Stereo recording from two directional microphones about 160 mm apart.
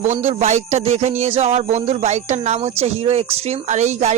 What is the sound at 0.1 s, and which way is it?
A man's voice, 45° right (ahead or behind).